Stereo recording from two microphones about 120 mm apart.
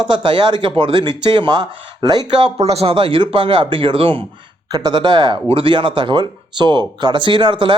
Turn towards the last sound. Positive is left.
turn(degrees=-45)  # may be behind; listen again after turning